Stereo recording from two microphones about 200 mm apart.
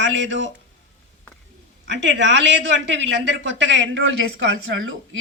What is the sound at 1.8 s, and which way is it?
A woman's voice, 65° right (ahead or behind).